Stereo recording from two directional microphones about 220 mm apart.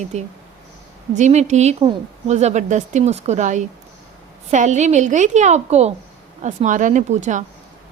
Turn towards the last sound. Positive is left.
turn(degrees=-35)  # may be behind; listen again after turning